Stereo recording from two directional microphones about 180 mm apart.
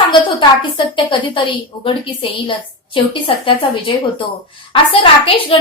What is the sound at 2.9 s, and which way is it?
A woman's voice, 30° left (ahead or behind).